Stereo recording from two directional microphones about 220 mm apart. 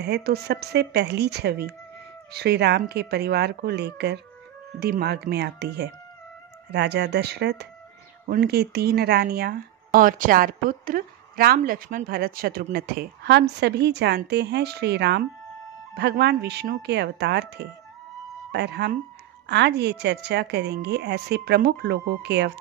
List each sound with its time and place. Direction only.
0.0 s speech: 45° right (ahead or behind)